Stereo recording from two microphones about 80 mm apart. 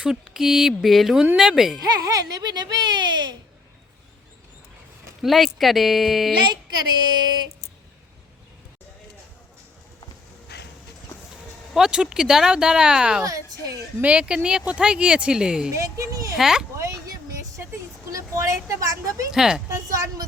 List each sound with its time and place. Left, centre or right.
0.0 s speech: centre
1.8 s speech: right
5.2 s speech: centre
6.4 s speech: right
11.7 s speech: centre
15.7 s speech: right
16.4 s speech: centre
18.1 s a woman's voice: right
19.3 s speech: centre
19.6 s speech: right